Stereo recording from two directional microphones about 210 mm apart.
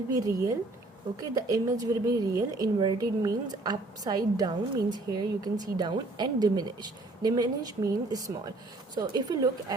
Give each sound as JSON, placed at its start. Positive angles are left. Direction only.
{"t": 0.1, "sound": "a woman's voice", "side_deg": -15}